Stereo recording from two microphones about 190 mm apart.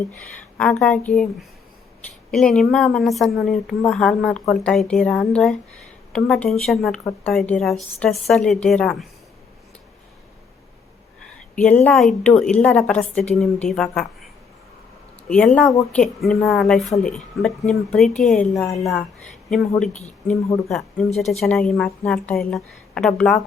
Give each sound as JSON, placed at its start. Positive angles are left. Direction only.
{"t": 0.5, "sound": "speech", "side_deg": 5}
{"t": 11.5, "sound": "a woman's voice", "side_deg": 5}
{"t": 15.3, "sound": "speech", "side_deg": 5}
{"t": 15.7, "sound": "speech", "side_deg": 15}
{"t": 16.0, "sound": "speech", "side_deg": 5}
{"t": 20.7, "sound": "speech", "side_deg": 0}